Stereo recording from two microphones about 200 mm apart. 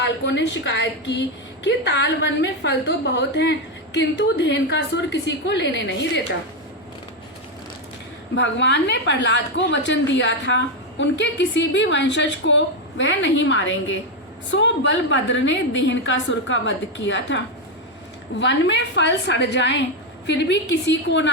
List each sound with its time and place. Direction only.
0.0 s a woman's voice: 60° left (ahead or behind)
8.4 s a woman's voice: 60° left (ahead or behind)